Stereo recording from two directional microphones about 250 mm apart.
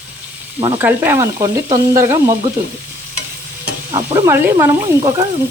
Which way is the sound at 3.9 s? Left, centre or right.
Centre.